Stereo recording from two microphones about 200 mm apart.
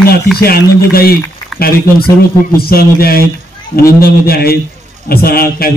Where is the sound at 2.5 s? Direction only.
50° left (ahead or behind).